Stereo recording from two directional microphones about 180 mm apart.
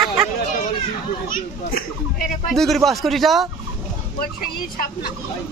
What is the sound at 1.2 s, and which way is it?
A child's voice, 50° left (ahead or behind).